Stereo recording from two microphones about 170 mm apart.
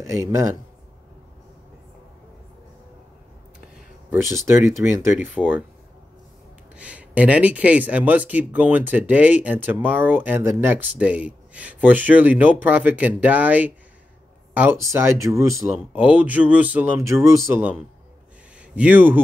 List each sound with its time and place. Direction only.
0.0 s speech: 15° right (ahead or behind)
4.1 s speech: 15° right (ahead or behind)
6.8 s speech: 10° right (ahead or behind)
18.8 s speech: 10° right (ahead or behind)